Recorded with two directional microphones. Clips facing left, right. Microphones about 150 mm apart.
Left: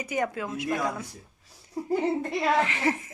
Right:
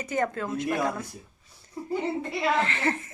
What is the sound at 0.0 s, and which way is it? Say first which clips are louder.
Speech: right 1 dB; 10° left (ahead or behind).